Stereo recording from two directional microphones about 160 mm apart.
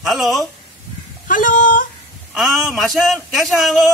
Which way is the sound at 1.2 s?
55° left (ahead or behind).